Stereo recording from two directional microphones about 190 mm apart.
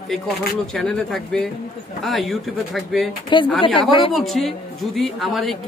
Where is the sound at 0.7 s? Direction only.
5° left (ahead or behind).